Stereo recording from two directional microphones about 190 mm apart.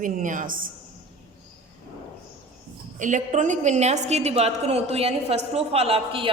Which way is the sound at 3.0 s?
40° right (ahead or behind).